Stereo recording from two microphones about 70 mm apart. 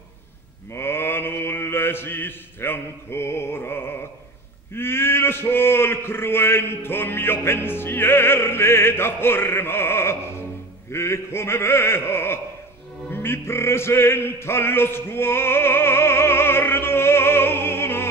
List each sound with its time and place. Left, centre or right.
0.7 s mantra: left
4.7 s a sound: left
10.9 s speech: left
13.1 s music: left